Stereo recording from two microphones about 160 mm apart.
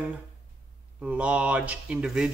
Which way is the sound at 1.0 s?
10° right (ahead or behind).